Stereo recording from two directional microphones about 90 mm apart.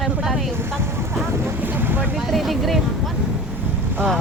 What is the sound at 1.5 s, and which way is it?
Boat, 20° right (ahead or behind).